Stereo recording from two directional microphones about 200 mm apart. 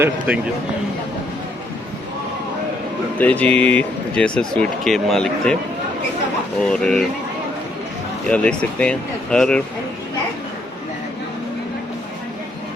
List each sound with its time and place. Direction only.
3.2 s speech: 10° left (ahead or behind)
6.6 s speech: 5° left (ahead or behind)
8.3 s speech: 5° left (ahead or behind)